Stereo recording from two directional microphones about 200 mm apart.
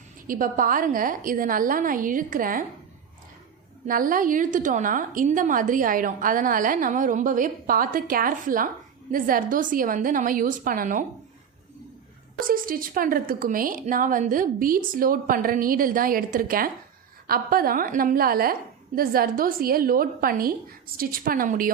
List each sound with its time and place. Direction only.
0.3 s a woman's voice: 40° right (ahead or behind)
3.8 s a woman's voice: 45° right (ahead or behind)
12.4 s a woman's voice: 45° right (ahead or behind)